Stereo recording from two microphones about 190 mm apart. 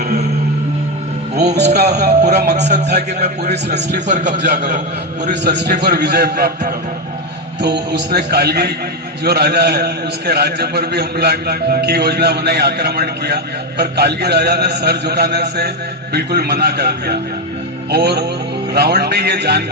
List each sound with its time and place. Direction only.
1.5 s a man's voice: 60° right (ahead or behind)
1.9 s a man's voice: 40° right (ahead or behind)
5.3 s a man's voice: 60° right (ahead or behind)